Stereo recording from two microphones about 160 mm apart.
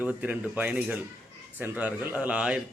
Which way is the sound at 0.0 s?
10° right (ahead or behind).